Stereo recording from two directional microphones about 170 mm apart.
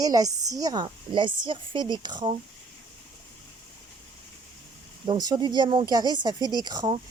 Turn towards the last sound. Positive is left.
turn(degrees=-25)  # may be behind; listen again after turning